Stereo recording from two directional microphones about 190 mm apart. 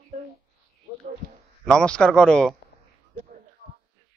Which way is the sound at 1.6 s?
5° left (ahead or behind).